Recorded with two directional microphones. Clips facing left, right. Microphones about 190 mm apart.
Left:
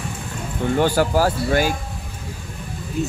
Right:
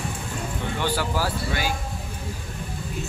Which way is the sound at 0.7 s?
45° left (ahead or behind).